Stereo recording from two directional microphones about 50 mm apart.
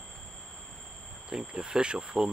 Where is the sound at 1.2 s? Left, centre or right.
Centre.